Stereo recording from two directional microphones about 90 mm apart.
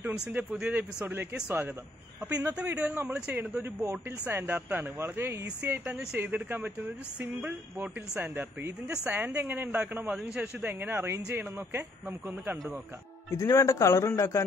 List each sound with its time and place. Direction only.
0.0 s a sound: 10° right (ahead or behind)
0.3 s speech: 20° right (ahead or behind)
13.4 s speech: 35° left (ahead or behind)